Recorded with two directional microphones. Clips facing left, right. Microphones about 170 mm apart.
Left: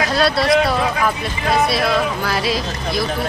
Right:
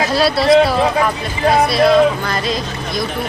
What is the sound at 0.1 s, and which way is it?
Speech, centre (ahead or behind).